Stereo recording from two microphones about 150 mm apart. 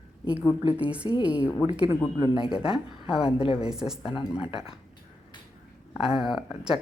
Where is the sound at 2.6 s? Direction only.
40° left (ahead or behind).